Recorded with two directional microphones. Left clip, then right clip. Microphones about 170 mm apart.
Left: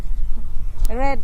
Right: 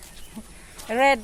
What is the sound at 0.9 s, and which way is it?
Speech, 15° right (ahead or behind).